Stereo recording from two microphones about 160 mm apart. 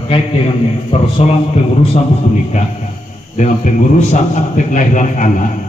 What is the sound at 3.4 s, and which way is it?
A man's voice, 50° left (ahead or behind).